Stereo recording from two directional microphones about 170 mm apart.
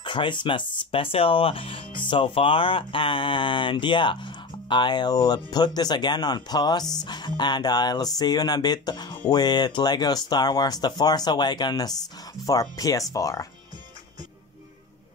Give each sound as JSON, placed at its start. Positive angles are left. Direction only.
{"t": 0.0, "sound": "speech", "side_deg": 30}